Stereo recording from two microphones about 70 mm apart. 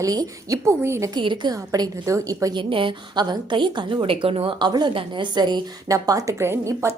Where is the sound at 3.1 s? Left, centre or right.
Right.